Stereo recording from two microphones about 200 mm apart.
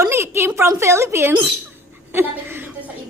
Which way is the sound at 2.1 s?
10° right (ahead or behind).